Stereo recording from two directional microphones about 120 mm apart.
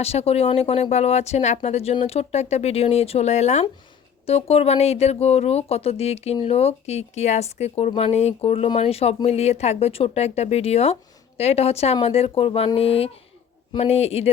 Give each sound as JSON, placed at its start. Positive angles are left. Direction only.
{"t": 0.0, "sound": "speech", "side_deg": 60}
{"t": 4.3, "sound": "speech", "side_deg": 55}